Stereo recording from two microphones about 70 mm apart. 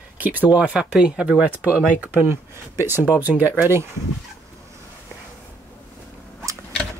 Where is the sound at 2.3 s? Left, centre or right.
Right.